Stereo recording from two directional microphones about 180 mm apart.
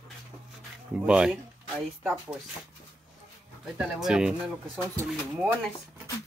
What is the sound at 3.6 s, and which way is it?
Speech, 5° right (ahead or behind).